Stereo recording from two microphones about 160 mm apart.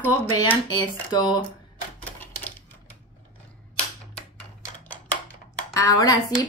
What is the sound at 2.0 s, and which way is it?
Typewriter, 10° left (ahead or behind).